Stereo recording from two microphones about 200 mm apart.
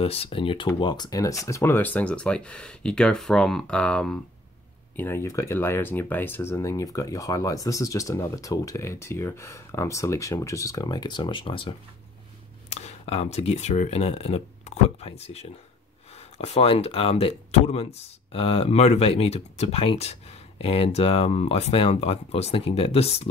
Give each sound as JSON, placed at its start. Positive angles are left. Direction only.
{"t": 0.0, "sound": "speech", "side_deg": 30}